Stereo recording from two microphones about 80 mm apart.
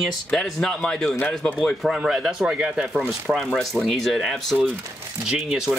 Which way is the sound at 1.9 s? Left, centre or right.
Centre.